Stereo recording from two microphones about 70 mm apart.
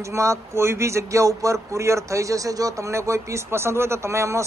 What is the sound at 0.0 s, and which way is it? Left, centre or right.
Speech, right.